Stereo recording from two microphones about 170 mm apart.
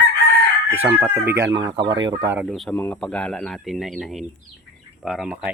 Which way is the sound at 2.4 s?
Centre (ahead or behind).